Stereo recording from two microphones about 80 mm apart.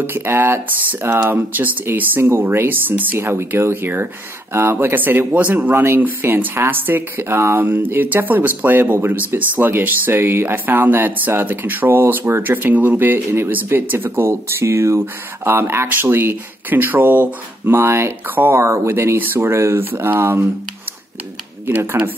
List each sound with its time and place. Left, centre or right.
0.0 s speech: right
21.6 s speech: right